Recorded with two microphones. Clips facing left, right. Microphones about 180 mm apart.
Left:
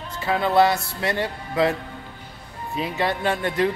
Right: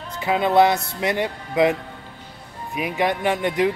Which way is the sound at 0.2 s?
20° right (ahead or behind).